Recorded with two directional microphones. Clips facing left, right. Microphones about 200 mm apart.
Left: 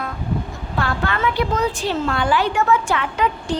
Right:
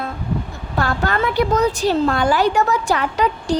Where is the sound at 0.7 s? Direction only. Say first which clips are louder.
Right 3 dB; 40° right (ahead or behind).